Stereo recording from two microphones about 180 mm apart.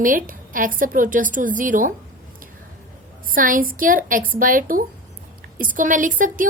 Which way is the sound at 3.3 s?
50° right (ahead or behind).